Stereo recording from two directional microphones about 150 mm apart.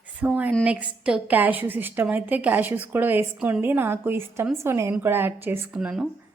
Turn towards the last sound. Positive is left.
turn(degrees=-5)  # may be behind; listen again after turning